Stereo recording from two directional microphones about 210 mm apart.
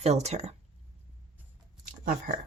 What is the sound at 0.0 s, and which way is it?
Speech, 30° right (ahead or behind).